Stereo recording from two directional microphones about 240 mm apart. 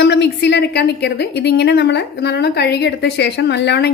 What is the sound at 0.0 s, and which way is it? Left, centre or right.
A woman's voice, left.